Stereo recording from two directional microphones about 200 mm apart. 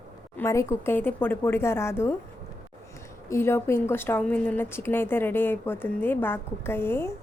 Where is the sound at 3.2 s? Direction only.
15° left (ahead or behind).